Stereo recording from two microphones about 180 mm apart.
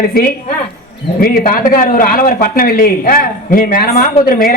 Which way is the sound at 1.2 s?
55° left (ahead or behind).